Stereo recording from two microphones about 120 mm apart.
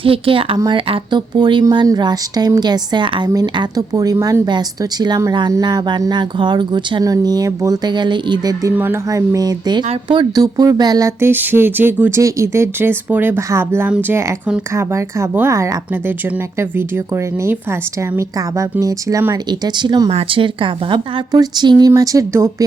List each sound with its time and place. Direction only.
0.0 s speech: 50° right (ahead or behind)
8.7 s speech: 20° right (ahead or behind)
9.0 s speech: 30° right (ahead or behind)
11.2 s speech: 20° right (ahead or behind)